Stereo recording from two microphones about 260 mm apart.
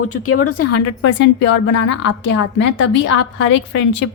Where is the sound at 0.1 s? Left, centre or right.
Left.